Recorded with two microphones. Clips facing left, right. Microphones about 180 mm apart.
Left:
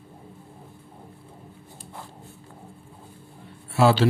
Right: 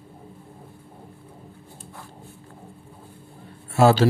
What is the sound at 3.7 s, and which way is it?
Speech, 45° right (ahead or behind).